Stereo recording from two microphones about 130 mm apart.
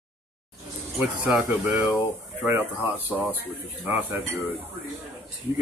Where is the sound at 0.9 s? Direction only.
10° right (ahead or behind).